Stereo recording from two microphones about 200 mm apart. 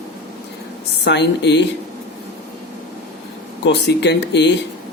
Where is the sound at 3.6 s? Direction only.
60° left (ahead or behind).